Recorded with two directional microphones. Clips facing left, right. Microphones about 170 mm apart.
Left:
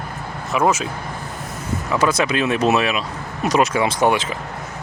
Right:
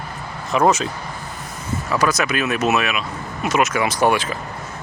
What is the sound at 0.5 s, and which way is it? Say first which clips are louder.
Speech: right 2 dB; 5° left (ahead or behind).